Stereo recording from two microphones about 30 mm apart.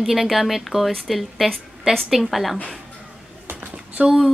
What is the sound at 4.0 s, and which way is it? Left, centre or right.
Speech, right.